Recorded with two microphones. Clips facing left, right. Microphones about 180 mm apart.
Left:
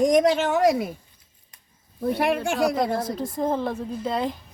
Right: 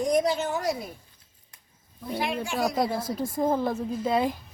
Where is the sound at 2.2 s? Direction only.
65° left (ahead or behind).